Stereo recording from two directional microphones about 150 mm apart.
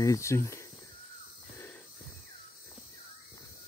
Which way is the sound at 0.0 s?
20° left (ahead or behind).